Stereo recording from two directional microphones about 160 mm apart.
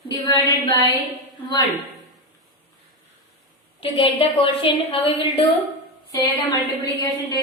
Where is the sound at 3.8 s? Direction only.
35° left (ahead or behind).